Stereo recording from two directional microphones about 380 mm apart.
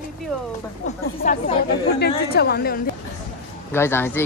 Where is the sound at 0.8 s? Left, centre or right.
Centre.